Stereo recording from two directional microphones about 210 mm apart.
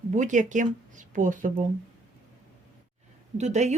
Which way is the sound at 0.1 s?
35° right (ahead or behind).